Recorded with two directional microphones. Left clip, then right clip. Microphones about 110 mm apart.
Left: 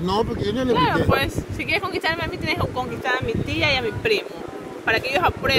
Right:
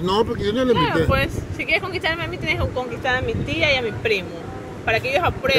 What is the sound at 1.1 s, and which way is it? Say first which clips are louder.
Speech: even; 55° left (ahead or behind).